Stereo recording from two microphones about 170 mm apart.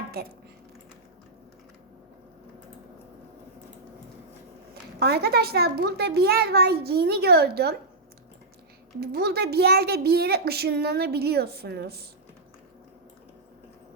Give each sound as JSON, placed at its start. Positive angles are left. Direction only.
{"t": 4.7, "sound": "a child's voice", "side_deg": -70}
{"t": 9.0, "sound": "a child's voice", "side_deg": -70}